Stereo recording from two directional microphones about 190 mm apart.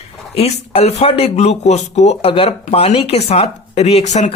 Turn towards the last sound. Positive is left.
turn(degrees=35)  # may be behind; listen again after turning